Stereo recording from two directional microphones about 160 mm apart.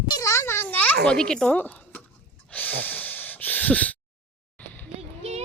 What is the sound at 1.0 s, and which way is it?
Speech, 5° left (ahead or behind).